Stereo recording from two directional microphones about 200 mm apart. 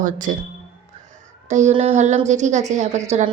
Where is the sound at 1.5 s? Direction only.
35° right (ahead or behind).